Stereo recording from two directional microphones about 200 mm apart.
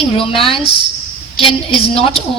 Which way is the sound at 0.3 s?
25° left (ahead or behind).